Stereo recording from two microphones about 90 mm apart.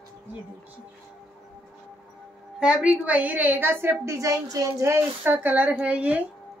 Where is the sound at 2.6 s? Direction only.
10° right (ahead or behind).